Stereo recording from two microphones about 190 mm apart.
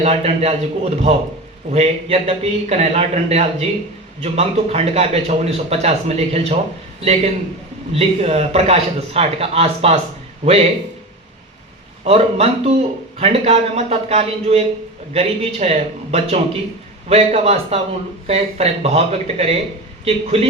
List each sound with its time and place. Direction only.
0.0 s speech: 35° right (ahead or behind)
12.0 s speech: 30° right (ahead or behind)